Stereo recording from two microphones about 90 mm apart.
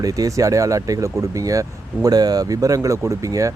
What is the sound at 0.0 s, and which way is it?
Speech, 40° right (ahead or behind).